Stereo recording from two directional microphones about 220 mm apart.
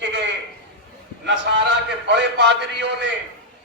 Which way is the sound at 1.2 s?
55° right (ahead or behind).